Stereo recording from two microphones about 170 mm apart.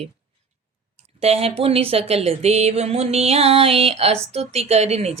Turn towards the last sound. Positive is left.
turn(degrees=-40)  # may be behind; listen again after turning